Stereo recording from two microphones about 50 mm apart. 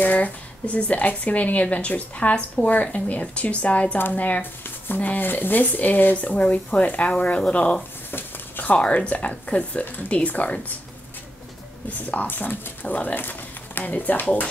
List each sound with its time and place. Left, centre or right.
0.0 s speech: left
8.1 s a sound: left
8.7 s speech: left
11.9 s speech: left